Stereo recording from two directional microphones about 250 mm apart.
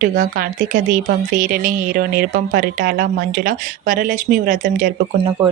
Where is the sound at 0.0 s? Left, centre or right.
Right.